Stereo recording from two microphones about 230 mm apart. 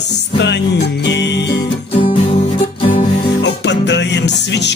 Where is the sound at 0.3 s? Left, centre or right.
Left.